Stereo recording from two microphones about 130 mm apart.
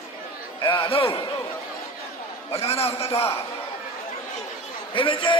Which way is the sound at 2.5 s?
50° left (ahead or behind).